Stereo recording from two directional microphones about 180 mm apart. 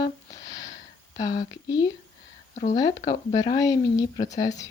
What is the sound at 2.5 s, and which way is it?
Speech, 45° left (ahead or behind).